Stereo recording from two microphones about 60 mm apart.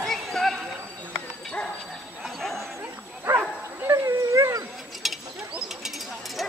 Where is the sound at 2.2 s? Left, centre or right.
Centre.